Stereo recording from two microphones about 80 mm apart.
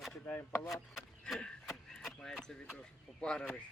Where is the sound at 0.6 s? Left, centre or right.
Centre.